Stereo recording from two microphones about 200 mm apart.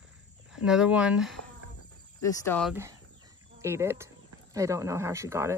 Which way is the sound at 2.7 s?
15° right (ahead or behind).